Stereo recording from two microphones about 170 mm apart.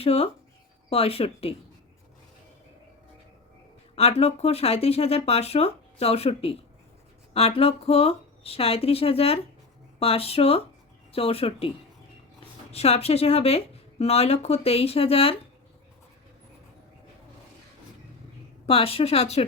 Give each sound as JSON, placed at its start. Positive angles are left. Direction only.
{"t": 0.0, "sound": "speech", "side_deg": 35}
{"t": 3.9, "sound": "speech", "side_deg": 35}
{"t": 12.7, "sound": "speech", "side_deg": 35}
{"t": 18.6, "sound": "speech", "side_deg": 35}